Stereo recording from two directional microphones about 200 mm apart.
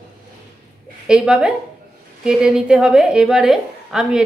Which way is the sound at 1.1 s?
5° right (ahead or behind).